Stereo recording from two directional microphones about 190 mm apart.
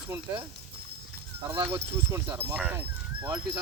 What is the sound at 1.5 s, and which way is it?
Speech, 15° right (ahead or behind).